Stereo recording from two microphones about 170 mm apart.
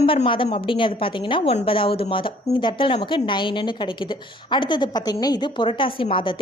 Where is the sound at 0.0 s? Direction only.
35° left (ahead or behind).